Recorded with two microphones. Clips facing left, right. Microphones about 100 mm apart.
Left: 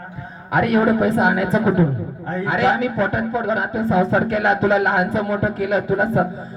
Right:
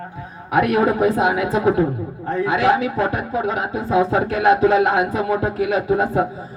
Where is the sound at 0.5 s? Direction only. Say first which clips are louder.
Even; 15° right (ahead or behind).